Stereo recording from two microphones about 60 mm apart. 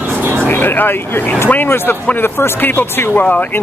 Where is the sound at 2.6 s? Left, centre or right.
Left.